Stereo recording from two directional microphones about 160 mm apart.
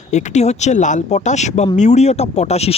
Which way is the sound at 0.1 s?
45° left (ahead or behind).